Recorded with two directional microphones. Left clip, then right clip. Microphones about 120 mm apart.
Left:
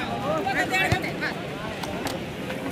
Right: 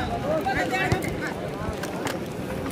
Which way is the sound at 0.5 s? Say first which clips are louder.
Left 3 dB; 5° left (ahead or behind).